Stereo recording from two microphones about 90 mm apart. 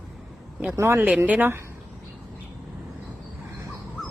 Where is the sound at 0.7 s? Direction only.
30° right (ahead or behind).